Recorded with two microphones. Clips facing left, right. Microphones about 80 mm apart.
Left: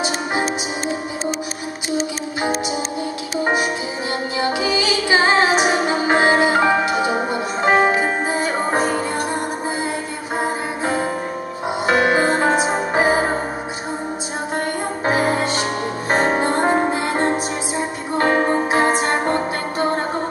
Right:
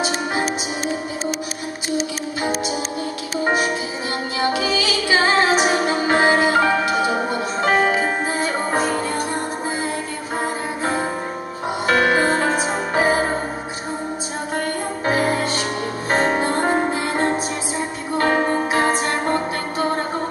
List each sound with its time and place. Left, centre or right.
4.5 s music: centre
11.9 s music: left
15.0 s music: left